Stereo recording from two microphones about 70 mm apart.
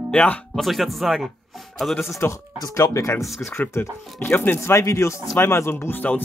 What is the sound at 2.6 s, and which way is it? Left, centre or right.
Speech, left.